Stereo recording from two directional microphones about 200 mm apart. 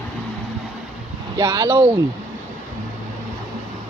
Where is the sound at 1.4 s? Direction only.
20° right (ahead or behind).